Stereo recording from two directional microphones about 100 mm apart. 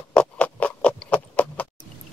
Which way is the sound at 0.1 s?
10° left (ahead or behind).